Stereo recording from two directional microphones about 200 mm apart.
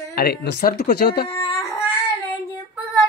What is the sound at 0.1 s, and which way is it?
Speech, 50° left (ahead or behind).